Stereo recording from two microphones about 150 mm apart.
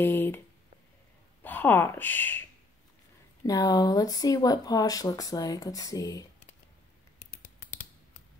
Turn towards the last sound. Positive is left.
turn(degrees=55)  # may be behind; listen again after turning